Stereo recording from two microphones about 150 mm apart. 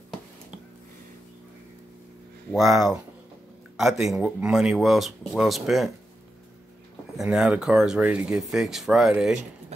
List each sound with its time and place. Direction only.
2.5 s speech: centre (ahead or behind)
7.2 s speech: 5° right (ahead or behind)